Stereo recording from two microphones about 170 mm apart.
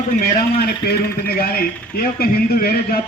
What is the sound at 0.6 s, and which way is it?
A man's voice, 65° left (ahead or behind).